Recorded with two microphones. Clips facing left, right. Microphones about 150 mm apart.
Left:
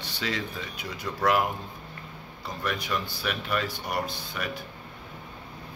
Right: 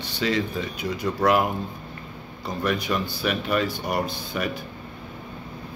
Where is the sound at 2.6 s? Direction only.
10° right (ahead or behind).